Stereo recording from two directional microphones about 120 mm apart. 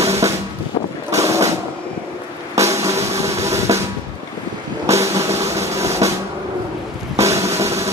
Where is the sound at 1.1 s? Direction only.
25° right (ahead or behind).